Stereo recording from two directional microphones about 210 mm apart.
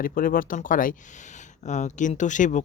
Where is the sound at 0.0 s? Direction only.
40° left (ahead or behind).